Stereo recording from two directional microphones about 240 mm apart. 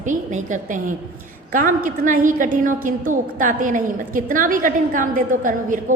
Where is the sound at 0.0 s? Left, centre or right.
Right.